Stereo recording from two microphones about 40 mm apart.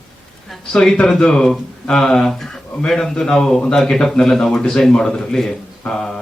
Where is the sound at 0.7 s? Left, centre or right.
Centre.